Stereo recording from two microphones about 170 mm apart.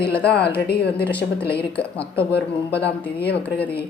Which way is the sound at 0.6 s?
75° left (ahead or behind).